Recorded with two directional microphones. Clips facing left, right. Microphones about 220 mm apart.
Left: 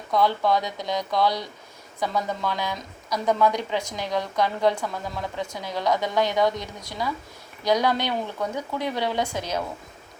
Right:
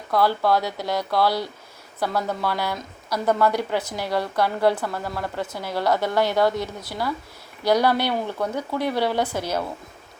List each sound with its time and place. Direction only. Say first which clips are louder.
0.1 s a woman's voice: right 1 dB; 5° right (ahead or behind)